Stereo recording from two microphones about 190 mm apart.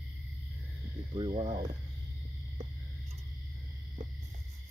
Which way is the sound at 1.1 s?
25° right (ahead or behind).